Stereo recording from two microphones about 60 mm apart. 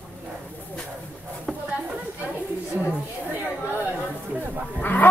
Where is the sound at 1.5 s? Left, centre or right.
Centre.